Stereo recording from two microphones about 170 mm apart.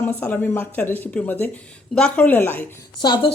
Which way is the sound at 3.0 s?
25° left (ahead or behind).